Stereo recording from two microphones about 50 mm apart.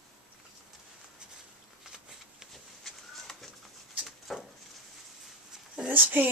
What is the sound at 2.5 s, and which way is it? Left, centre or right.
Bird, centre.